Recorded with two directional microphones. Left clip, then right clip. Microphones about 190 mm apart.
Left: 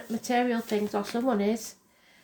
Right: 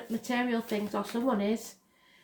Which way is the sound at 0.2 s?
30° left (ahead or behind).